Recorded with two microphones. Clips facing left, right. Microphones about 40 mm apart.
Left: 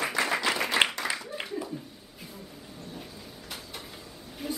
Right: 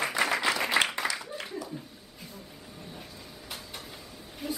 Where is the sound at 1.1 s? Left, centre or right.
Left.